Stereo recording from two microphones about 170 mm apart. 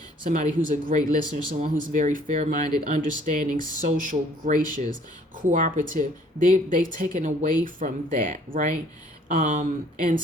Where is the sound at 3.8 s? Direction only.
55° right (ahead or behind).